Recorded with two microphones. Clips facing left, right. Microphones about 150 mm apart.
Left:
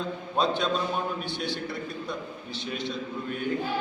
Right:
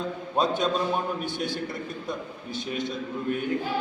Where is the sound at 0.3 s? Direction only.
45° right (ahead or behind).